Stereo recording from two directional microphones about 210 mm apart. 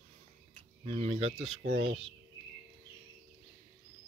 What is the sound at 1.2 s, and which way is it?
Speech, 70° right (ahead or behind).